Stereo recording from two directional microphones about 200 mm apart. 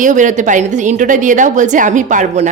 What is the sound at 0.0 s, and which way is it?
Speech, 40° right (ahead or behind).